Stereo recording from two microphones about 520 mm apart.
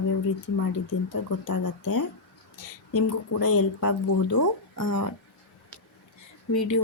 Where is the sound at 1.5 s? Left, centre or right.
Left.